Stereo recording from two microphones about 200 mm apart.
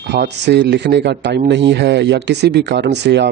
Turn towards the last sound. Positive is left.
turn(degrees=-60)  # may be behind; listen again after turning